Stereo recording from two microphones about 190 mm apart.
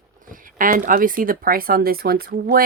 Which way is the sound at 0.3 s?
45° right (ahead or behind).